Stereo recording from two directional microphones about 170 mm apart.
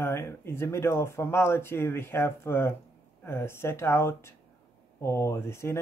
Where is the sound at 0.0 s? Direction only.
15° left (ahead or behind).